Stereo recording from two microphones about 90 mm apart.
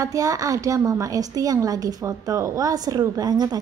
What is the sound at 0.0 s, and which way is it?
A woman's voice, 40° right (ahead or behind).